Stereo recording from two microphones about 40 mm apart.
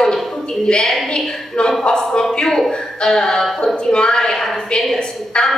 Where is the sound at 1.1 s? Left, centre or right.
Left.